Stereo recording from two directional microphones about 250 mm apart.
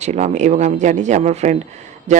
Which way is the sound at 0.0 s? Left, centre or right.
Right.